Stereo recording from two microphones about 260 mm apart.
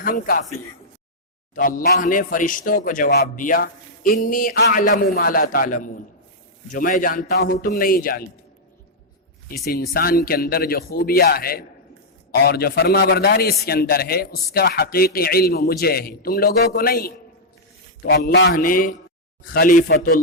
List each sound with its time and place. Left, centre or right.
0.0 s a man's voice: left
1.5 s a man's voice: left
9.5 s a man's voice: left